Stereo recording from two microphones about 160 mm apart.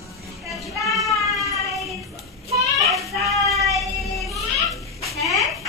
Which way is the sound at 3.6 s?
Centre (ahead or behind).